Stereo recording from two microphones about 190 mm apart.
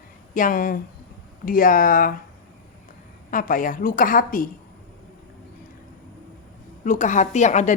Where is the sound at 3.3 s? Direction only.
45° left (ahead or behind).